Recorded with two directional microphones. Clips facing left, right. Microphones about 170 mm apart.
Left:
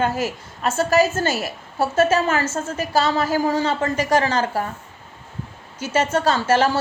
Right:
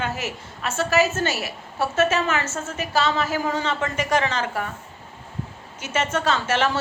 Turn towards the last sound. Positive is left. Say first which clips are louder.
# left 4 dB
turn(degrees=35)  # may be behind; listen again after turning